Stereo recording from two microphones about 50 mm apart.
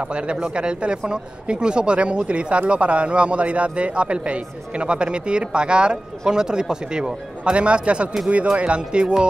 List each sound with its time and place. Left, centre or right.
0.0 s a man's voice: right